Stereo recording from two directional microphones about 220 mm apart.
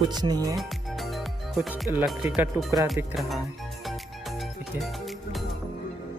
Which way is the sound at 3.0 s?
5° right (ahead or behind).